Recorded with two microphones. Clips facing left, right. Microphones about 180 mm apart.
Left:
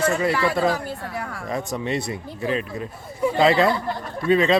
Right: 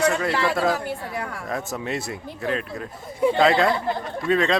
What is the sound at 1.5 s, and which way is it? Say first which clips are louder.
Speech: left 4 dB; centre (ahead or behind).